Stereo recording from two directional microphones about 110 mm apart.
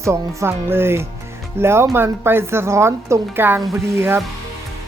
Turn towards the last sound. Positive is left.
turn(degrees=-20)  # may be behind; listen again after turning